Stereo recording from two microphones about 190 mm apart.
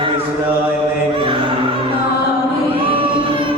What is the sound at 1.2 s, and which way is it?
Music, 30° right (ahead or behind).